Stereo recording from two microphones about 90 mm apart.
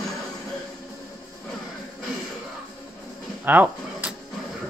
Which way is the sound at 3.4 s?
20° right (ahead or behind).